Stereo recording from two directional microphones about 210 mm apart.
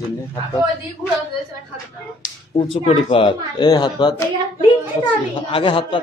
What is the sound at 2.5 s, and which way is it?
Speech, 25° left (ahead or behind).